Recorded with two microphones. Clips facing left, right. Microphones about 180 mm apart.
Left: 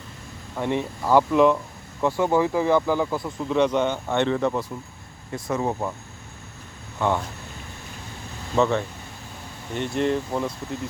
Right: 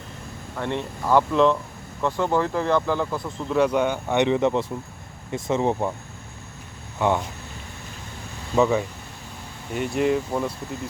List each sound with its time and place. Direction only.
0.5 s speech: 10° left (ahead or behind); by 5.9 s 25° right (ahead or behind)
7.0 s speech: 15° right (ahead or behind)
8.5 s speech: 5° right (ahead or behind)